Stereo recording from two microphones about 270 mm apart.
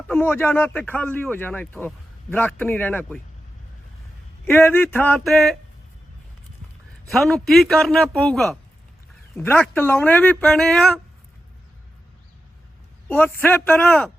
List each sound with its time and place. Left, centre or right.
0.1 s speech: centre
4.4 s speech: centre
7.1 s a man's voice: centre
13.1 s speech: centre